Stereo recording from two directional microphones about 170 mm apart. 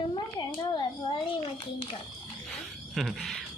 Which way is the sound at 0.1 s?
30° left (ahead or behind).